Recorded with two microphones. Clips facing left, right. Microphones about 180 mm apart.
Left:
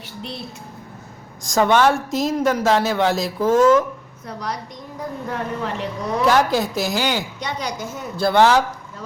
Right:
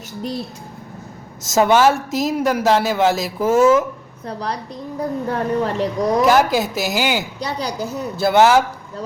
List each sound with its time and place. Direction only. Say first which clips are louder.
1.5 s a woman's voice: right 2 dB; 5° right (ahead or behind)
4.3 s a woman's voice: right 3 dB; 35° right (ahead or behind)
6.2 s a woman's voice: left 1 dB; 5° right (ahead or behind)
7.3 s a woman's voice: right 3 dB; 35° right (ahead or behind)
8.1 s a woman's voice: right 2 dB; 5° right (ahead or behind)